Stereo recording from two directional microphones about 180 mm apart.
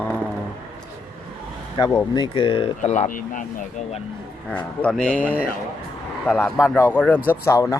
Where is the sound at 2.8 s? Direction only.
40° left (ahead or behind).